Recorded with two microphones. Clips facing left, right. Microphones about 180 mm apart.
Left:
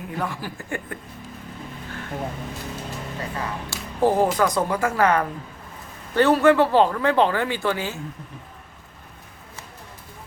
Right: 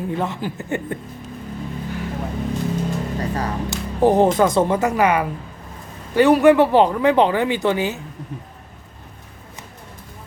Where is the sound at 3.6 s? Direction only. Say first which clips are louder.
Right 4 dB; 20° right (ahead or behind).